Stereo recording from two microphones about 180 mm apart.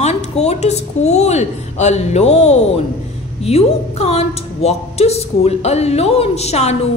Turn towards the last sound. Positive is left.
turn(degrees=35)  # may be behind; listen again after turning